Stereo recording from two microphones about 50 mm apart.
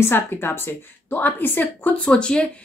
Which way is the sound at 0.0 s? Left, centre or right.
Left.